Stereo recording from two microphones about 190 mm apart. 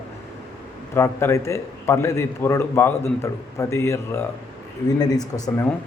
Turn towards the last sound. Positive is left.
turn(degrees=20)  # may be behind; listen again after turning